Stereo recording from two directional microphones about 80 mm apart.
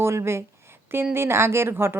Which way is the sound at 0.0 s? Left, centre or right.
Right.